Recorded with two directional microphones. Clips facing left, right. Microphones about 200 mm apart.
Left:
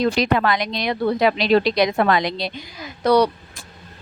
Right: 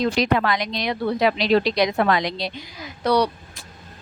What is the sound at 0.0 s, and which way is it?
Speech, 60° left (ahead or behind).